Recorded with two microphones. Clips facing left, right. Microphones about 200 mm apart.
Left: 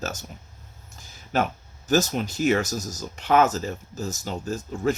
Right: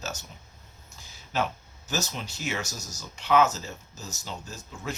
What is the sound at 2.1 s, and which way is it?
Speech, 50° left (ahead or behind).